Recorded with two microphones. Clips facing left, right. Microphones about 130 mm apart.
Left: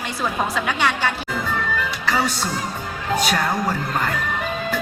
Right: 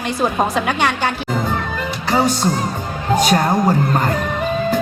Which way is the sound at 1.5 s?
40° right (ahead or behind).